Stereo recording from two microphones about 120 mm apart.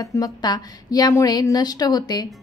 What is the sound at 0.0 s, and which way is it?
A woman's voice, 30° left (ahead or behind).